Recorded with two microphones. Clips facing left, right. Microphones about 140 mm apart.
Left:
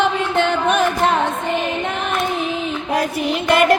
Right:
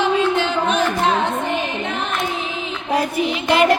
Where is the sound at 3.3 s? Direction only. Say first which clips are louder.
Left 2 dB; 50° left (ahead or behind).